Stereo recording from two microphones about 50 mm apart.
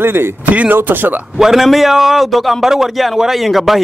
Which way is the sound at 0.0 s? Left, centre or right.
Right.